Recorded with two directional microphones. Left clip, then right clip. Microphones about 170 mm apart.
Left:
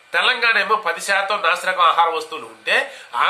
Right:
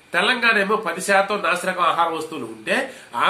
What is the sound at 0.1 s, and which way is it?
A man's voice, centre (ahead or behind).